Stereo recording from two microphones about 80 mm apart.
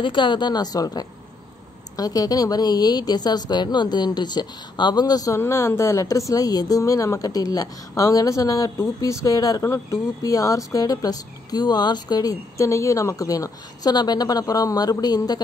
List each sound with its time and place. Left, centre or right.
0.0 s a woman's voice: left
5.4 s speech: left